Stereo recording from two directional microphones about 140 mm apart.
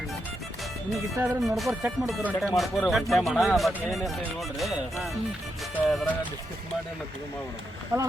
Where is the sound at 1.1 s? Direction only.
20° right (ahead or behind).